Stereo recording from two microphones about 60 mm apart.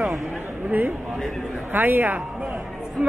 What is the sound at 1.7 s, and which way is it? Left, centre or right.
Speech, right.